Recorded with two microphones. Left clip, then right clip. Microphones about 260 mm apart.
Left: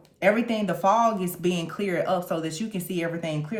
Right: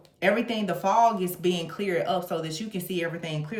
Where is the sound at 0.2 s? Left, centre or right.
Left.